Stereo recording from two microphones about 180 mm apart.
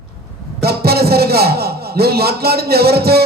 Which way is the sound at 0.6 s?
60° right (ahead or behind).